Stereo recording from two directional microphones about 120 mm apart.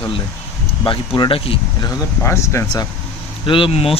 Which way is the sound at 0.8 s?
45° left (ahead or behind).